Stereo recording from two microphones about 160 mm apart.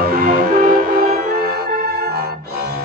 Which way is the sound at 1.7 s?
75° right (ahead or behind).